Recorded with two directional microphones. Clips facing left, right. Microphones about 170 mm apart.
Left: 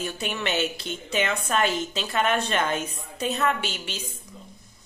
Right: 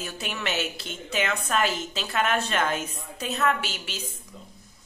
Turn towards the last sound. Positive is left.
turn(degrees=-5)  # may be behind; listen again after turning